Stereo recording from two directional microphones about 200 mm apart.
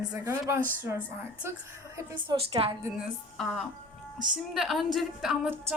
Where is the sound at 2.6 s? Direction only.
25° right (ahead or behind).